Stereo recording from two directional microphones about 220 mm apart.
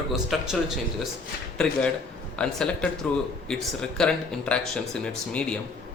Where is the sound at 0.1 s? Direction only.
Centre (ahead or behind).